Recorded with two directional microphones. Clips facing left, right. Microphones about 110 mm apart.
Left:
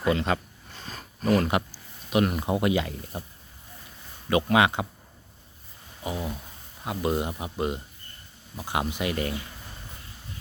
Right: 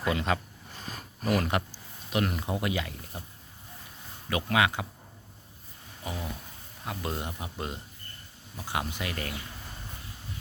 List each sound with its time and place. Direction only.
0.0 s speech: centre (ahead or behind)
1.5 s a sound: 10° left (ahead or behind)
2.5 s speech: 25° left (ahead or behind)
4.3 s speech: 25° left (ahead or behind)
6.0 s a sound: 20° left (ahead or behind)
6.8 s speech: 15° left (ahead or behind)